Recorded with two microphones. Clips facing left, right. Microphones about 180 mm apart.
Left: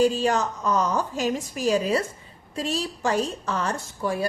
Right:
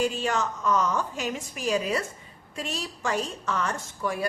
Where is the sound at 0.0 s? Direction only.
35° left (ahead or behind).